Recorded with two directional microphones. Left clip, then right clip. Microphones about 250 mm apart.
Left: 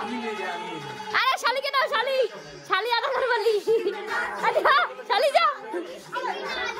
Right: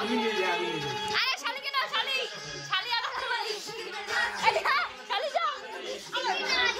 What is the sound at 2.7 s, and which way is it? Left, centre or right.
Music, left.